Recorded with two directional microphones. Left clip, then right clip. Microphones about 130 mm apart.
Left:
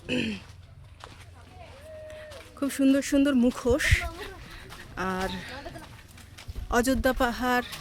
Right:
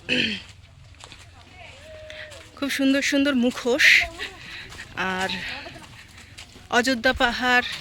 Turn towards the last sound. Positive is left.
turn(degrees=15)  # may be behind; listen again after turning